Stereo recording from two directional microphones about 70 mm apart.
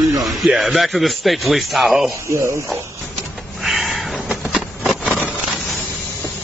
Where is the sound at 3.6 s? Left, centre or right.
Centre.